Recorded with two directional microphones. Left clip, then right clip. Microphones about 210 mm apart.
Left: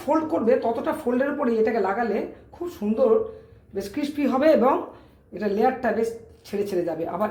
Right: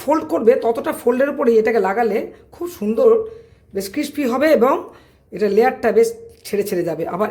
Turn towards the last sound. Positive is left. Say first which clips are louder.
# right 5 dB
turn(degrees=-50)  # may be behind; listen again after turning